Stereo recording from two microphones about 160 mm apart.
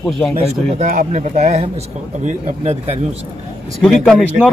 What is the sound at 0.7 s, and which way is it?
Speech, 45° right (ahead or behind).